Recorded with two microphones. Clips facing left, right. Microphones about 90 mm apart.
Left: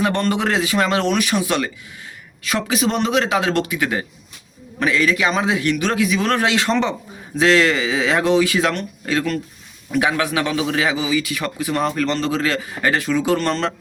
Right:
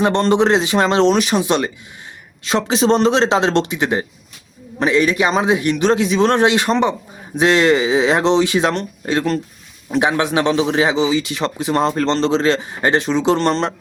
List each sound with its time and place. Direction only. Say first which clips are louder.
0.0 s a man's voice: right 5 dB; 25° right (ahead or behind)